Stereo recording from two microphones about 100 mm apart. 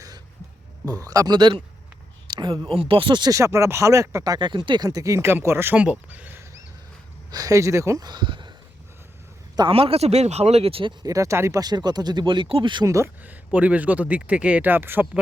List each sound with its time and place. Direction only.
1.0 s speech: 35° right (ahead or behind)
1.4 s speech: 50° right (ahead or behind)
3.3 s speech: 30° right (ahead or behind)
7.3 s speech: 35° right (ahead or behind)
9.6 s speech: 70° right (ahead or behind)
11.0 s speech: 35° right (ahead or behind)
11.6 s speech: 45° right (ahead or behind)
12.8 s speech: 30° right (ahead or behind)
13.2 s a man's voice: 15° right (ahead or behind)